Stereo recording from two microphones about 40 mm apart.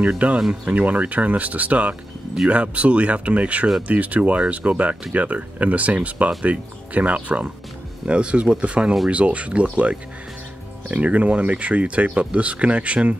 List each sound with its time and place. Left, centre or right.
0.0 s speech: right